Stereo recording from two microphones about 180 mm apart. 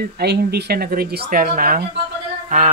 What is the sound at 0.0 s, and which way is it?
Speech, 60° right (ahead or behind).